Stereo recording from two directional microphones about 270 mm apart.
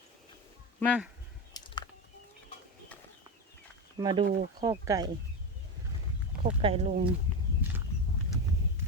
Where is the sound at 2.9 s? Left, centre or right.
Centre.